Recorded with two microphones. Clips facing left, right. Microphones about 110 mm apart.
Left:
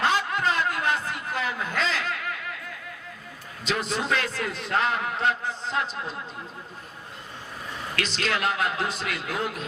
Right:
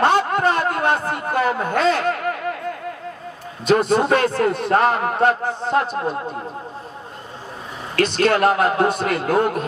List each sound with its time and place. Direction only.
0.0 s a sound: 50° right (ahead or behind)
3.7 s a man's voice: 55° right (ahead or behind)
7.9 s a man's voice: 50° right (ahead or behind)